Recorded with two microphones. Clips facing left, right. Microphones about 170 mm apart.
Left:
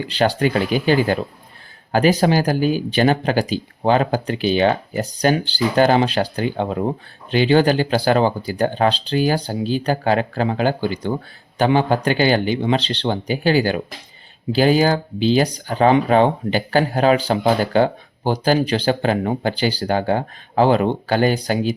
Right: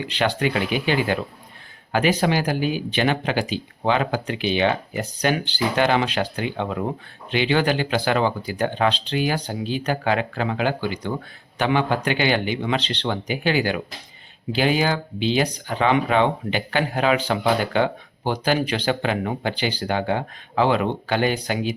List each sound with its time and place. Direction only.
0.0 s speech: 35° left (ahead or behind)